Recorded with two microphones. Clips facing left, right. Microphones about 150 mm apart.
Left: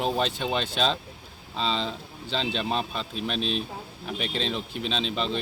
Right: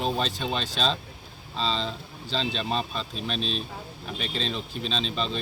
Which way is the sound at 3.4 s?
65° left (ahead or behind).